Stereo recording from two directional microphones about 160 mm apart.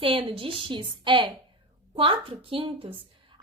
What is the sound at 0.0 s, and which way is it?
A woman's voice, 35° right (ahead or behind).